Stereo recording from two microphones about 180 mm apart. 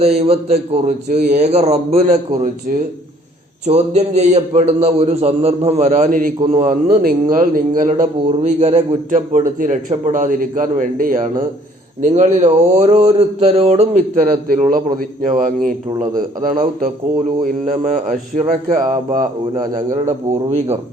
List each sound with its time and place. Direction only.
0.0 s a man's voice: 35° right (ahead or behind)
20.0 s speech: 35° right (ahead or behind)